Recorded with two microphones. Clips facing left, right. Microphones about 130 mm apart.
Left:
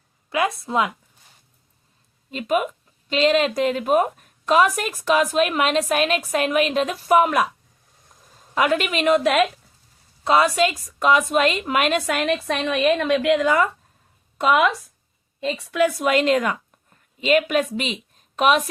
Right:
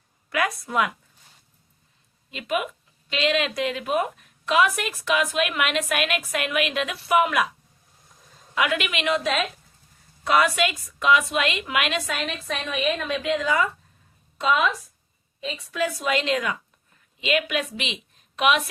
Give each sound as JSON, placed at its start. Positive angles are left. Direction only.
{"t": 0.3, "sound": "a woman's voice", "side_deg": 25}
{"t": 2.3, "sound": "a woman's voice", "side_deg": 40}
{"t": 8.5, "sound": "a woman's voice", "side_deg": 40}
{"t": 10.2, "sound": "a woman's voice", "side_deg": 30}
{"t": 12.0, "sound": "a woman's voice", "side_deg": 60}